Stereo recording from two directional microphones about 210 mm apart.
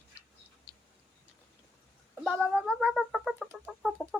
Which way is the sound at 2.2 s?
Centre (ahead or behind).